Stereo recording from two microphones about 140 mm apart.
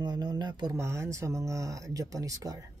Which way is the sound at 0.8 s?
20° right (ahead or behind).